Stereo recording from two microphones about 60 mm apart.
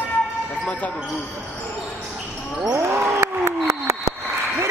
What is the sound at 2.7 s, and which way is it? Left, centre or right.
Basketball bounce, right.